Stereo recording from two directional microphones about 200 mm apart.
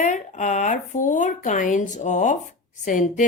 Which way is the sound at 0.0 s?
40° left (ahead or behind).